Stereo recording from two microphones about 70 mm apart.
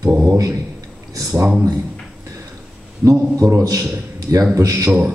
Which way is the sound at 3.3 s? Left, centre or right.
Right.